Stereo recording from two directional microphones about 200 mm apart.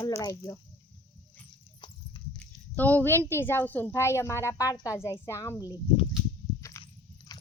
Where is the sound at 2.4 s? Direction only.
10° left (ahead or behind).